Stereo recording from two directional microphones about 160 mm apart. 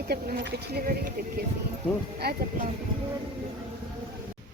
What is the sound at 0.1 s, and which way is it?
Speech, 85° right.